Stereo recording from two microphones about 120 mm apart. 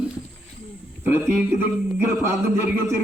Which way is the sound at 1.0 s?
20° right (ahead or behind).